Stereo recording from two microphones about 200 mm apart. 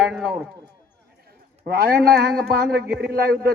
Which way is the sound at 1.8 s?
50° right (ahead or behind).